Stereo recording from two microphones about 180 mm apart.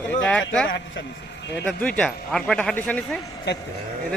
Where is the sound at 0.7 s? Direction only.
90° left.